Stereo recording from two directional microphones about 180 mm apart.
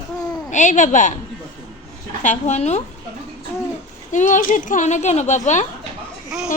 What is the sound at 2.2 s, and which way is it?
Speech, 40° left (ahead or behind).